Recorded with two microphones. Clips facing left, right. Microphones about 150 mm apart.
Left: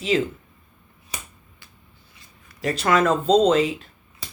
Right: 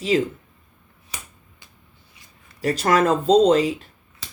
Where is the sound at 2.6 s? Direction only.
40° right (ahead or behind).